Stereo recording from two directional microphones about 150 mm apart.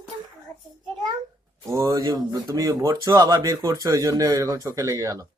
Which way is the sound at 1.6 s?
20° right (ahead or behind).